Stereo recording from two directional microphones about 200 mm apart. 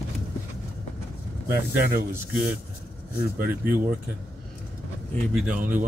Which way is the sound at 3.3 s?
50° right (ahead or behind).